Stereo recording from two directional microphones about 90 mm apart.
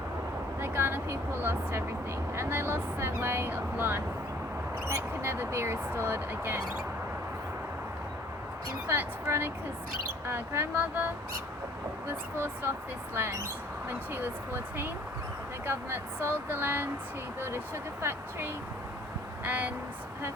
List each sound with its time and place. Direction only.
0.6 s a sound: 25° right (ahead or behind)
2.3 s speech: 30° right (ahead or behind)
5.2 s speech: 30° right (ahead or behind)
8.9 s speech: 30° right (ahead or behind)
18.0 s speech: 25° right (ahead or behind)